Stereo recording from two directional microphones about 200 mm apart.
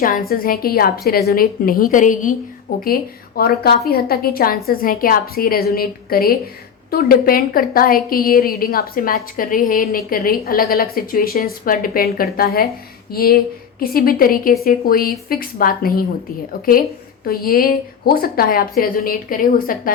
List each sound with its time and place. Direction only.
0.0 s a woman's voice: 45° left (ahead or behind)
17.2 s a woman's voice: 50° left (ahead or behind)